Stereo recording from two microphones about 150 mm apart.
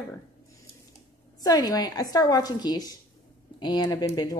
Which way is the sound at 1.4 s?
25° left (ahead or behind).